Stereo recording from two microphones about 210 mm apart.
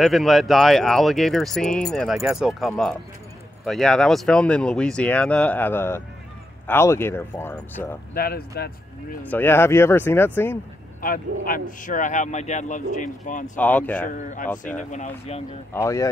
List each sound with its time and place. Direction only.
0.0 s speech: centre (ahead or behind)
8.1 s speech: 45° left (ahead or behind)
9.3 s speech: 10° left (ahead or behind)
11.0 s speech: 40° left (ahead or behind)
13.6 s speech: 5° left (ahead or behind)
14.1 s speech: 35° left (ahead or behind)
15.7 s speech: 15° left (ahead or behind)